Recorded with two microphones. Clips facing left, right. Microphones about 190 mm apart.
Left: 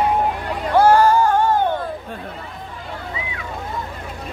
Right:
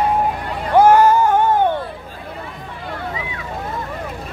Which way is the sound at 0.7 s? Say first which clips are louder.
Right 2 dB; 20° right (ahead or behind).